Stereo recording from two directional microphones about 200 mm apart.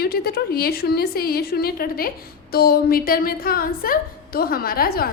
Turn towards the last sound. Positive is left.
turn(degrees=50)  # may be behind; listen again after turning